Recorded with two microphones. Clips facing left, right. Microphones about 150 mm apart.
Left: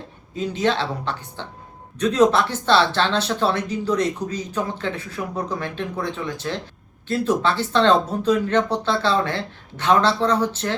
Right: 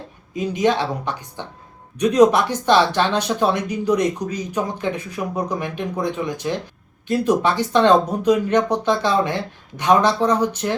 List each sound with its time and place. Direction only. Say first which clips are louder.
0.3 s speech: right 3 dB; 15° right (ahead or behind)